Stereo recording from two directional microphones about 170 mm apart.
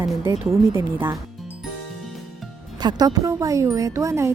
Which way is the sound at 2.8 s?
20° right (ahead or behind).